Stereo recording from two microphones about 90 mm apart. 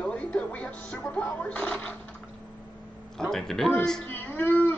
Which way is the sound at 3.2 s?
5° left (ahead or behind).